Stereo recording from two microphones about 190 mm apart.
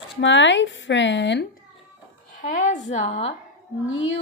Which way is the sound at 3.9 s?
90° left.